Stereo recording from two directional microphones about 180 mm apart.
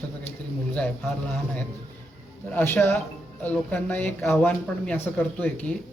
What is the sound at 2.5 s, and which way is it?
Speech, 10° left (ahead or behind).